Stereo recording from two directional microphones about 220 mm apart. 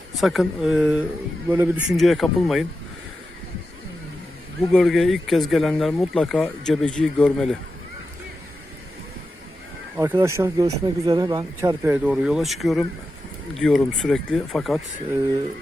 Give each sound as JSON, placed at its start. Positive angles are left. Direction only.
{"t": 0.2, "sound": "speech", "side_deg": 0}
{"t": 4.7, "sound": "speech", "side_deg": 0}
{"t": 10.0, "sound": "speech", "side_deg": -10}